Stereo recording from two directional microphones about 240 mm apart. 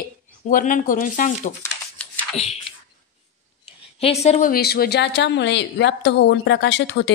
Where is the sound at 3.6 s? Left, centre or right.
Left.